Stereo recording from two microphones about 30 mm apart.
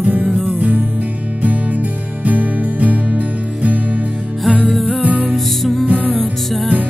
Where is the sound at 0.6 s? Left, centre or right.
Right.